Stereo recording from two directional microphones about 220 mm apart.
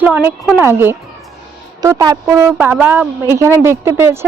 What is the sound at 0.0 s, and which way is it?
Speech, 10° right (ahead or behind).